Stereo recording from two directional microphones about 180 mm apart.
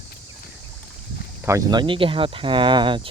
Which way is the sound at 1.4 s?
20° right (ahead or behind).